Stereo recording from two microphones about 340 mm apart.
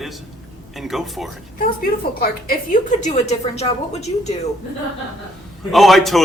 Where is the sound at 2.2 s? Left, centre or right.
Left.